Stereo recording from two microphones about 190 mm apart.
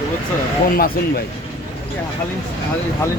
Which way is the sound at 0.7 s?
50° left (ahead or behind).